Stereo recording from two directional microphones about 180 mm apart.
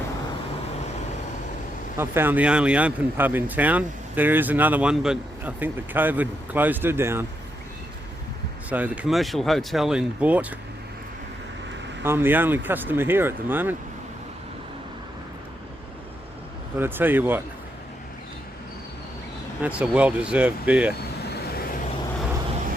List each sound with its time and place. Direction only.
2.0 s speech: 10° right (ahead or behind)
8.7 s speech: 10° right (ahead or behind)
12.0 s speech: 10° right (ahead or behind)
16.7 s speech: 10° right (ahead or behind)
19.6 s speech: 5° right (ahead or behind)
21.2 s vehicle: 60° left (ahead or behind)